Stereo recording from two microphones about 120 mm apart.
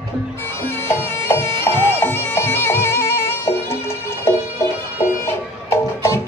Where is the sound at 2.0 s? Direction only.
15° left (ahead or behind).